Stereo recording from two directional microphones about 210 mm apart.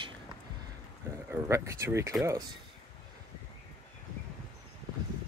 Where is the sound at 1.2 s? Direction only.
10° right (ahead or behind).